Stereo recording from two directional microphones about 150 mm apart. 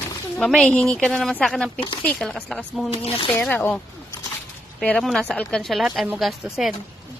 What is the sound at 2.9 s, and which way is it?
Speech, 35° left (ahead or behind).